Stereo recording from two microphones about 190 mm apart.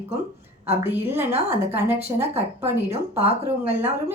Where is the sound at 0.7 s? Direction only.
10° right (ahead or behind).